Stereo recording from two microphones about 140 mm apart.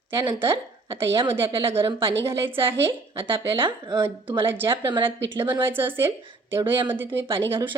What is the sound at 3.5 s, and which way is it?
Speech, 35° right (ahead or behind).